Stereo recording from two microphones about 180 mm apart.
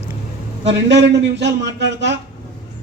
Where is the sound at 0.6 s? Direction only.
80° right.